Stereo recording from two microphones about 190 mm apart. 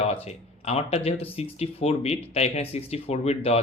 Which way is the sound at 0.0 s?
35° left (ahead or behind).